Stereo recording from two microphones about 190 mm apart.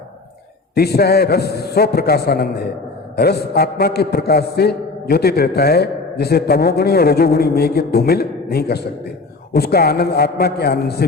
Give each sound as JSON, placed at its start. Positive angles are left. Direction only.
{"t": 0.7, "sound": "a man's voice", "side_deg": 55}